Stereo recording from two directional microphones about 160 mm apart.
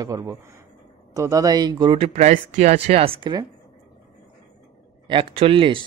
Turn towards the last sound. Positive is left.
turn(degrees=-30)  # may be behind; listen again after turning